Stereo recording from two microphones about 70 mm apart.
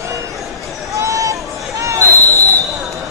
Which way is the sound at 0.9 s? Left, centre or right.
Right.